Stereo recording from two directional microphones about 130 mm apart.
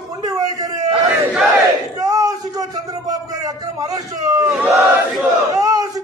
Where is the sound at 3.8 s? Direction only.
25° right (ahead or behind).